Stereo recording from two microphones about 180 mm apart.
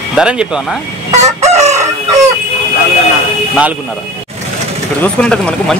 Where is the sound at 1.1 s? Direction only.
40° right (ahead or behind).